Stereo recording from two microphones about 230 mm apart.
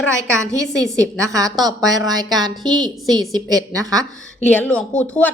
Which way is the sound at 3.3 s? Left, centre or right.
Centre.